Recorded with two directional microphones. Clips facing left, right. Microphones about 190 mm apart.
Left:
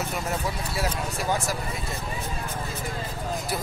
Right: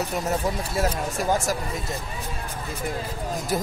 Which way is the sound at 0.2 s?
40° right (ahead or behind).